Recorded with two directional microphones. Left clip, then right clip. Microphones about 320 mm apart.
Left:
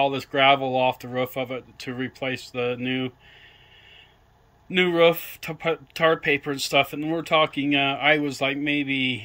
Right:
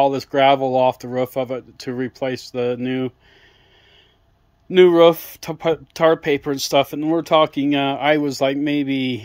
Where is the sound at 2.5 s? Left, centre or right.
Centre.